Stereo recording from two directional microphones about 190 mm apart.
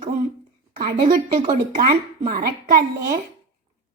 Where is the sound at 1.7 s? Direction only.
50° right (ahead or behind).